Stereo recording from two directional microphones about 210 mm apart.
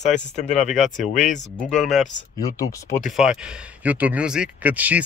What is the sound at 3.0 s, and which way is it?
Speech, 5° right (ahead or behind).